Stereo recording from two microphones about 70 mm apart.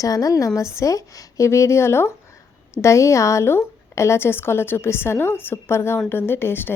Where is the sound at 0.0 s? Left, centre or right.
Left.